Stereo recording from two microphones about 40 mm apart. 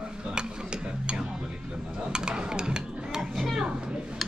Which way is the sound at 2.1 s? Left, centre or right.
Right.